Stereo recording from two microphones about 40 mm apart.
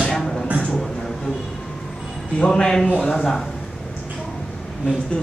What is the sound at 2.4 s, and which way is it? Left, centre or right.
Speech, left.